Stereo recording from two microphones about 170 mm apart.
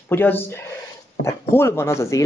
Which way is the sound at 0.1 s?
10° left (ahead or behind).